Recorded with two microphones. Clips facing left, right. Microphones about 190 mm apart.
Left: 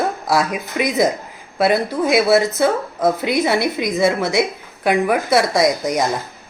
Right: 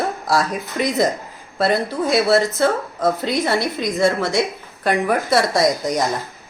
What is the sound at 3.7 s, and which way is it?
A woman's voice, 10° left (ahead or behind).